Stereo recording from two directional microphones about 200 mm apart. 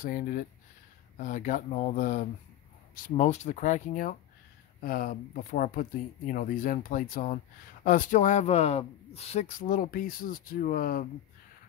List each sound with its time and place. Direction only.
0.0 s speech: 45° left (ahead or behind)